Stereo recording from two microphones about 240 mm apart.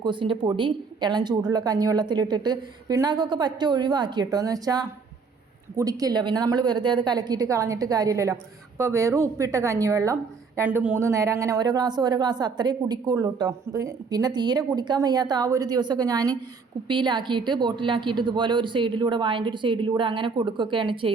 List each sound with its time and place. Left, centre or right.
0.0 s a woman's voice: centre